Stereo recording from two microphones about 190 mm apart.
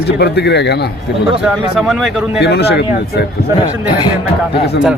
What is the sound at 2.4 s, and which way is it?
Speech, 60° left (ahead or behind).